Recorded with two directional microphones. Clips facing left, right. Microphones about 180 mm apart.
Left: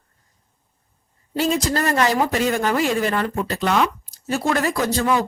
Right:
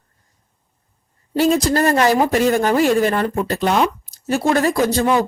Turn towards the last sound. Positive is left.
turn(degrees=-25)  # may be behind; listen again after turning